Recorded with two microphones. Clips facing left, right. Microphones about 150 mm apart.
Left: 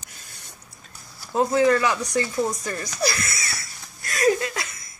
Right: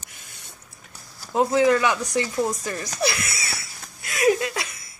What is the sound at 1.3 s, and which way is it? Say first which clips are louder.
Speech: even; 10° right (ahead or behind).